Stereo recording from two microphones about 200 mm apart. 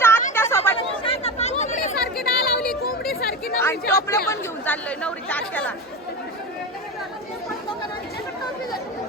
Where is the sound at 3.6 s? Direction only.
15° left (ahead or behind).